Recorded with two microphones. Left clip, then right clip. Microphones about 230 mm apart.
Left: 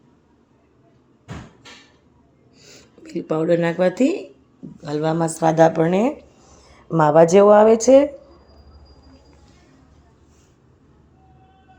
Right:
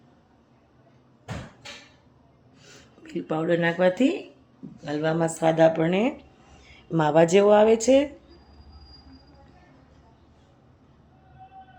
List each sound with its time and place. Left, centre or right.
2.6 s speech: centre